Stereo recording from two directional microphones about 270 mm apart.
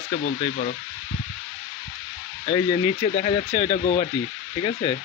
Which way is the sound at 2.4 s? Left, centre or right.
Centre.